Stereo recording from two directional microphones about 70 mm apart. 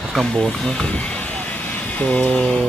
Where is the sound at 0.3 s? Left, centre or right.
Centre.